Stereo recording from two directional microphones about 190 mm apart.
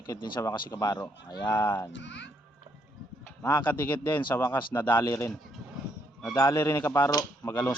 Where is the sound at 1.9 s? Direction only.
70° left (ahead or behind).